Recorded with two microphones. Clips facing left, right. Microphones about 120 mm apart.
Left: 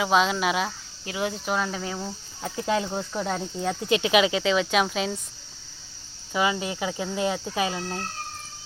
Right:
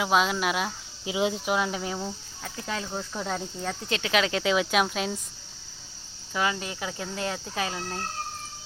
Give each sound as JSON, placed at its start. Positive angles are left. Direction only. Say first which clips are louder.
{"t": 0.0, "sound": "speech", "louder": "left 2 dB", "side_deg": 0}
{"t": 1.0, "sound": "speech", "louder": "right 2 dB", "side_deg": -15}
{"t": 2.4, "sound": "speech", "louder": "left 8 dB", "side_deg": 15}
{"t": 3.2, "sound": "speech", "louder": "left 3 dB", "side_deg": 5}
{"t": 6.3, "sound": "speech", "louder": "left 3 dB", "side_deg": 10}